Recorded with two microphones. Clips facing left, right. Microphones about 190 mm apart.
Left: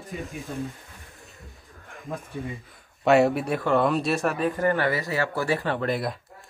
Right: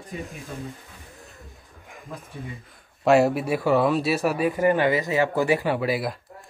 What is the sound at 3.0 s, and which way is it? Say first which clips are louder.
Speech: right 1 dB; centre (ahead or behind).